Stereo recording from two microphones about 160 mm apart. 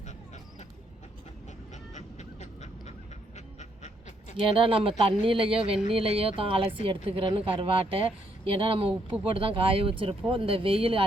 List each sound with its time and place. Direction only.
1.7 s honk: 45° left (ahead or behind)
3.3 s a sound: 45° left (ahead or behind)
4.4 s speech: 35° right (ahead or behind)